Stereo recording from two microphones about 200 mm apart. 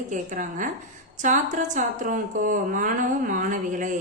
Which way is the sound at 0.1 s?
40° right (ahead or behind).